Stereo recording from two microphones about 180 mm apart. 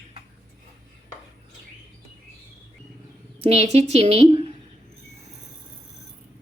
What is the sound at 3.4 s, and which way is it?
A woman's voice, 35° right (ahead or behind).